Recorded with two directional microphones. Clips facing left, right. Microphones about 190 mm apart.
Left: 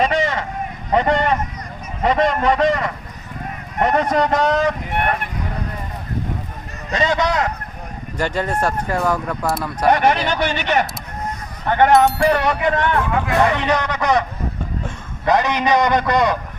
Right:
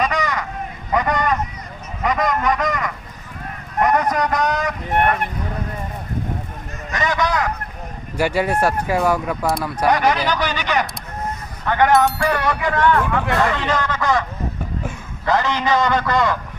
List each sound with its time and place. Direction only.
0.0 s vehicle: 25° left (ahead or behind)
0.9 s a sound: 25° left (ahead or behind)
2.0 s a man's voice: 30° left (ahead or behind)
6.9 s a man's voice: 25° left (ahead or behind)
8.2 s speech: 10° right (ahead or behind)
9.8 s a man's voice: 25° left (ahead or behind)
11.6 s a sound: 20° left (ahead or behind)
12.2 s a man's voice: 20° left (ahead or behind)